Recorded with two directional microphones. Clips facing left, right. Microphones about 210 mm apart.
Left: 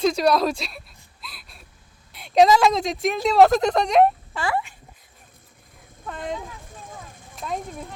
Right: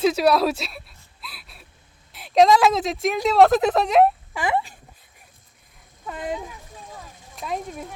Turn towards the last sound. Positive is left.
turn(degrees=0)  # may be behind; listen again after turning